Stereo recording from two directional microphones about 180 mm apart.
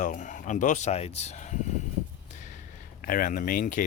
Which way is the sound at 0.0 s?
45° left (ahead or behind).